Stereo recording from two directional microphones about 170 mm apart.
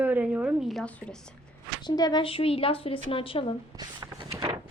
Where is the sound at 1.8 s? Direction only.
25° left (ahead or behind).